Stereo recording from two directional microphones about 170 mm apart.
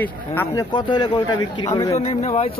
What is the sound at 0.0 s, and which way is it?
Speech, 10° left (ahead or behind).